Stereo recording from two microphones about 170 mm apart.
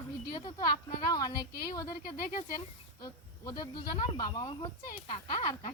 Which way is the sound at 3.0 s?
20° left (ahead or behind).